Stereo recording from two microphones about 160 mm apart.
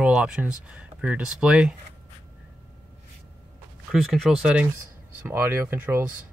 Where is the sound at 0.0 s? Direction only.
5° right (ahead or behind).